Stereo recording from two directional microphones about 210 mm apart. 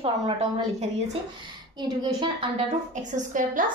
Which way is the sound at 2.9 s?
35° right (ahead or behind).